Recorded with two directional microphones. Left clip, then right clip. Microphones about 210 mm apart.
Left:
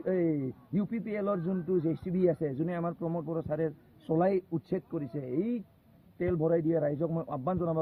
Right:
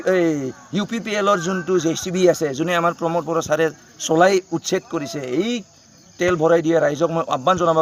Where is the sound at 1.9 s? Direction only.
65° right (ahead or behind).